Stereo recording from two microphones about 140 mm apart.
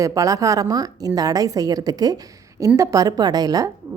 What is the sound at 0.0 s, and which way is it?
A woman's voice, 25° right (ahead or behind).